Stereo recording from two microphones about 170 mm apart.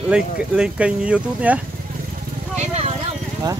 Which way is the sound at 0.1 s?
5° right (ahead or behind).